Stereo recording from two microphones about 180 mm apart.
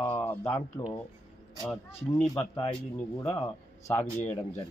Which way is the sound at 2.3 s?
20° left (ahead or behind).